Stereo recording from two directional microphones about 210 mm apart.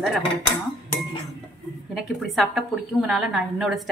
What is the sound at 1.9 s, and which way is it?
A woman's voice, centre (ahead or behind).